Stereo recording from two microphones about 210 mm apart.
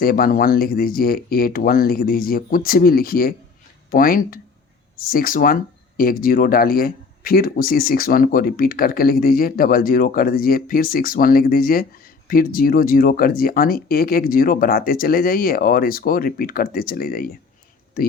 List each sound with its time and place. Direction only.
0.0 s speech: 45° left (ahead or behind)